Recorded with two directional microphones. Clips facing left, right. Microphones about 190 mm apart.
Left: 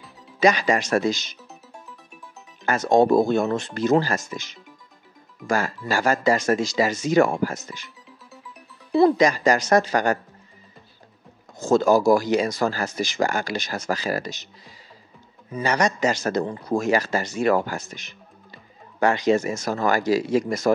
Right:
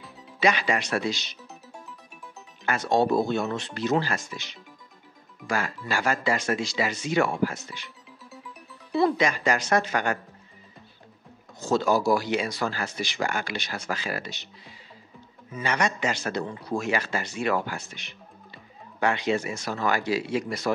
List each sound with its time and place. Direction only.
0.4 s speech: 40° left (ahead or behind)
2.6 s speech: 45° left (ahead or behind)
8.9 s speech: 40° left (ahead or behind)
11.5 s speech: 45° left (ahead or behind)
15.5 s speech: 40° left (ahead or behind)